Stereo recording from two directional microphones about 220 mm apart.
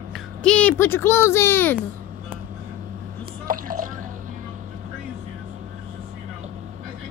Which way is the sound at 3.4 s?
40° right (ahead or behind).